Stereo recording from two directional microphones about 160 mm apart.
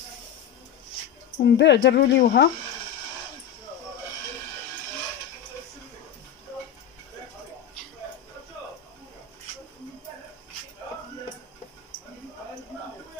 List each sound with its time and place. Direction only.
1.4 s speech: 90° left